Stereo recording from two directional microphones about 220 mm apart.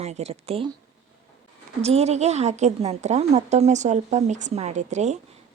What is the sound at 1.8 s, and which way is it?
A woman's voice, 30° right (ahead or behind).